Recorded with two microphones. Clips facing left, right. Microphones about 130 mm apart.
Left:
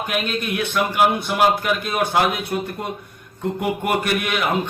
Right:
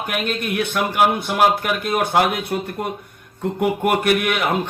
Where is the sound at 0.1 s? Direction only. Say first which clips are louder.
Right 2 dB; 55° right (ahead or behind).